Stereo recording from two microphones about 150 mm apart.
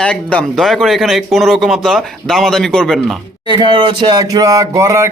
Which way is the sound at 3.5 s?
30° right (ahead or behind).